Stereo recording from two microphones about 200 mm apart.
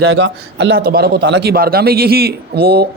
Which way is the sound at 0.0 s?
70° right (ahead or behind).